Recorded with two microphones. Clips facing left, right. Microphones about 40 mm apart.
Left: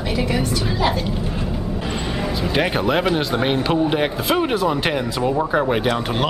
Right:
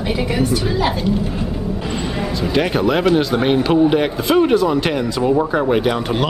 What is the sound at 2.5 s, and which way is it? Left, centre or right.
A man's voice, centre.